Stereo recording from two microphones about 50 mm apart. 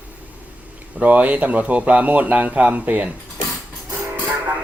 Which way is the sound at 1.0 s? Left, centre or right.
Right.